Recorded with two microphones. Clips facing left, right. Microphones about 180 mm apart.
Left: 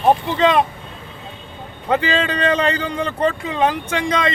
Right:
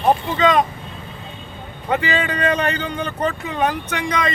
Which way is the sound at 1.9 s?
30° left (ahead or behind).